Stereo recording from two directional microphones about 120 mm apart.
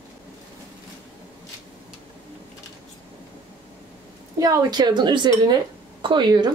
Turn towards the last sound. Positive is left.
turn(degrees=-35)  # may be behind; listen again after turning